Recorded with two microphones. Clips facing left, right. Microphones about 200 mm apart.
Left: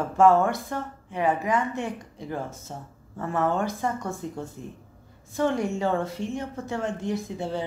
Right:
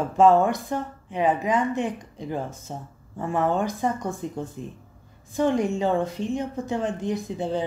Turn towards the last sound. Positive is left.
turn(degrees=-20)  # may be behind; listen again after turning